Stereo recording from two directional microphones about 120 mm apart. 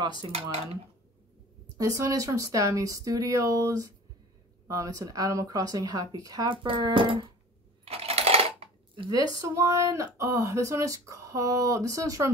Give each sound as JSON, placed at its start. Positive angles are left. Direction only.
{"t": 0.0, "sound": "speech", "side_deg": -35}
{"t": 0.3, "sound": "speech", "side_deg": -60}
{"t": 1.8, "sound": "speech", "side_deg": -30}
{"t": 6.5, "sound": "speech", "side_deg": -45}
{"t": 7.8, "sound": "coin", "side_deg": -55}
{"t": 9.4, "sound": "speech", "side_deg": -25}